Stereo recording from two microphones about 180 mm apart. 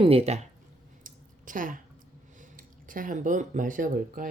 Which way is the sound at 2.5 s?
50° right (ahead or behind).